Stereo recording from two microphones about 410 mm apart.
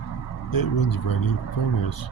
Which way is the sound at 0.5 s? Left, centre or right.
Left.